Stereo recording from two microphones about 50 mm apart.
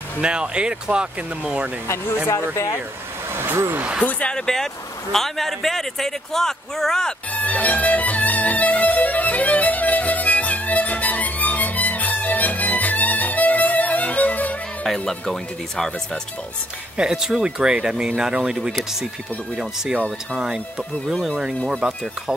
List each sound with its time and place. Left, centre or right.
0.2 s speech: centre
2.5 s speech: left
3.3 s speech: right
4.0 s speech: left
5.1 s a man's voice: centre
7.3 s music: left
14.9 s a man's voice: centre
16.9 s speech: centre